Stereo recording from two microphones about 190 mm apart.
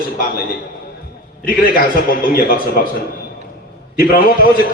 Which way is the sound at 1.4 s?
50° left (ahead or behind).